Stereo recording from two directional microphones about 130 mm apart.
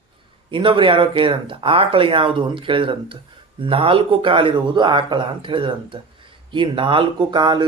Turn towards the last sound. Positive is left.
turn(degrees=-35)  # may be behind; listen again after turning